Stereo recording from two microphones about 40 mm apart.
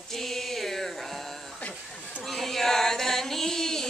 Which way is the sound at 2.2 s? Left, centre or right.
Centre.